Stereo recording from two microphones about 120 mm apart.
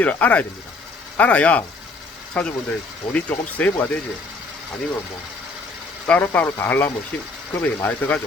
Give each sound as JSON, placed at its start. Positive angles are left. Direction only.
{"t": 0.0, "sound": "speech", "side_deg": 15}
{"t": 6.1, "sound": "speech", "side_deg": 15}